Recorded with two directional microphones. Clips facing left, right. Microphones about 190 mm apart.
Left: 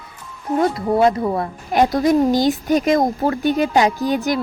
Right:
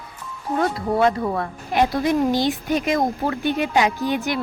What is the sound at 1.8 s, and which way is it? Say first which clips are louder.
Speech: left 4 dB; 40° left (ahead or behind).